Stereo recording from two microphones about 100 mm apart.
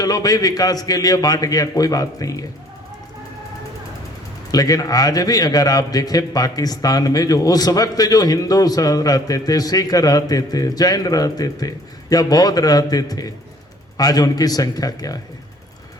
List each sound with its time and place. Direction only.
0.0 s a man's voice: 40° left (ahead or behind)
4.5 s a man's voice: 40° left (ahead or behind)